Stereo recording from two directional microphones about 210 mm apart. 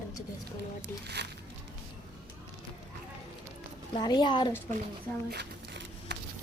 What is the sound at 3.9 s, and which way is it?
Speech, 20° left (ahead or behind).